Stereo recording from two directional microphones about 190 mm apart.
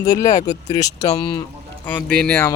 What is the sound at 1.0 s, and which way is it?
Speech, 30° left (ahead or behind).